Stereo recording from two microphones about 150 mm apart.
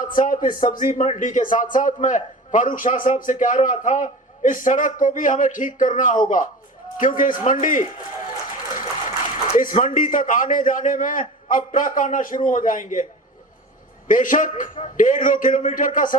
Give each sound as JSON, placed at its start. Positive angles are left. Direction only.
{"t": 0.0, "sound": "a man's voice", "side_deg": 65}
{"t": 9.0, "sound": "a man's voice", "side_deg": 60}
{"t": 14.1, "sound": "a man's voice", "side_deg": 60}